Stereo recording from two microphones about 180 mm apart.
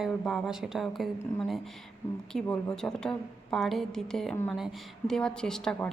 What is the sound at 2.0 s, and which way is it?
Speech, 15° left (ahead or behind).